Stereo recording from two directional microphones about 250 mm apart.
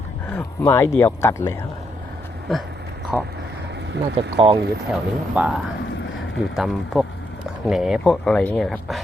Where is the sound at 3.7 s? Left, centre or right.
Right.